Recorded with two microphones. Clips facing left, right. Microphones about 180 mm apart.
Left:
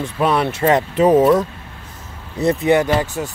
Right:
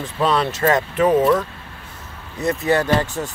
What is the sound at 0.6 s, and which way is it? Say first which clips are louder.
Speech: left 3 dB; 25° left (ahead or behind).